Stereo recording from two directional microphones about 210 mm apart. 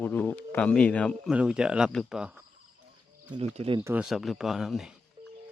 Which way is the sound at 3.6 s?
25° right (ahead or behind).